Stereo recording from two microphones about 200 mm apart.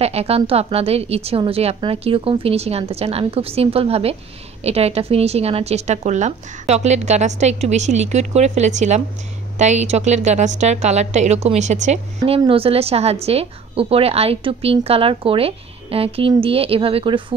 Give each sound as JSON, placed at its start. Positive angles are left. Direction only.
{"t": 0.0, "sound": "a woman's voice", "side_deg": -30}